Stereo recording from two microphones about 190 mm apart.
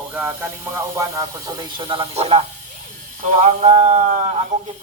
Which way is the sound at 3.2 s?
40° right (ahead or behind).